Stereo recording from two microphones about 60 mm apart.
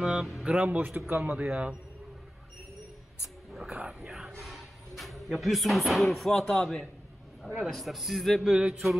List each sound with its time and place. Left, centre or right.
0.0 s a man's voice: centre; by 1.3 s right
1.3 s speech: centre
3.5 s a sound: centre
7.7 s a man's voice: centre